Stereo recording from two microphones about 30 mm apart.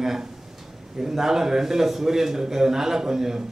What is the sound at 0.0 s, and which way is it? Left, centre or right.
A man's voice, centre.